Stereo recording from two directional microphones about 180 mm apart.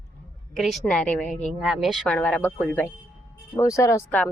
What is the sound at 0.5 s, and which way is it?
A woman's voice, centre (ahead or behind).